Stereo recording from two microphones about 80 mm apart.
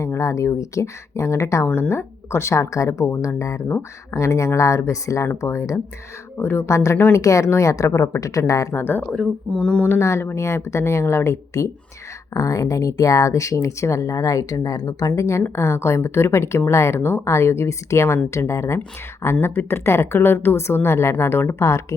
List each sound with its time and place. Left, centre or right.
0.0 s speech: left
8.8 s speech: left
9.1 s speech: centre
9.9 s speech: left